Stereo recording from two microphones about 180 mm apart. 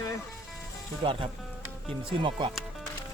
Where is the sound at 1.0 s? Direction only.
30° right (ahead or behind).